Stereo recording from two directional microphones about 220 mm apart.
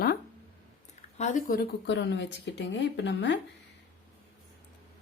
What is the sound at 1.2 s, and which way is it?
Speech, 30° left (ahead or behind).